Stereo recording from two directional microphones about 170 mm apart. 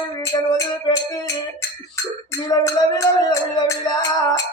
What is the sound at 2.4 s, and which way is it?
Music, 20° left (ahead or behind).